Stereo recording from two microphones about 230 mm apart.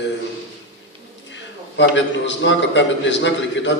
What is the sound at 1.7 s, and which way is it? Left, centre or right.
A man's voice, left.